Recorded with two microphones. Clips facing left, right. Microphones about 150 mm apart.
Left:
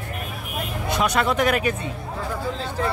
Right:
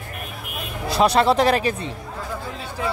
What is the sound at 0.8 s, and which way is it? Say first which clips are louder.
Speech: right 5 dB; 35° right (ahead or behind).